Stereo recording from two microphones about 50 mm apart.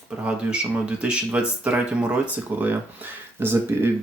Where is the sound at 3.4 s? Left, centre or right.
Right.